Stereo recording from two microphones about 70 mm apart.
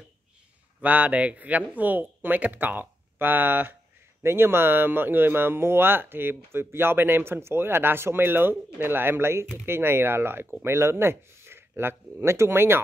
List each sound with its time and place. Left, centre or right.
0.7 s speech: right